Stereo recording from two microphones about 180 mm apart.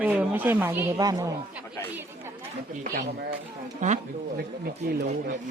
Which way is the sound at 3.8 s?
45° right (ahead or behind).